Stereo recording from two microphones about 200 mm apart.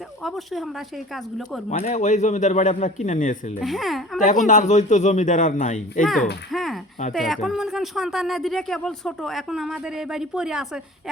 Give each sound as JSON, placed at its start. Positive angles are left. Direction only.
{"t": 0.2, "sound": "speech", "side_deg": 0}
{"t": 1.8, "sound": "a man's voice", "side_deg": 35}
{"t": 3.6, "sound": "speech", "side_deg": 0}
{"t": 4.2, "sound": "a man's voice", "side_deg": 40}
{"t": 6.0, "sound": "speech", "side_deg": 0}
{"t": 6.5, "sound": "a sound", "side_deg": 0}
{"t": 7.1, "sound": "speech", "side_deg": 0}